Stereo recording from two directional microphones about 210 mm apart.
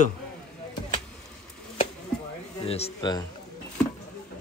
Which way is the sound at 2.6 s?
30° left (ahead or behind).